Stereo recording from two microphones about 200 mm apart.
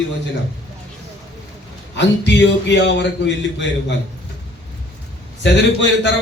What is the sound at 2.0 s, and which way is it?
A man's voice, 60° left (ahead or behind).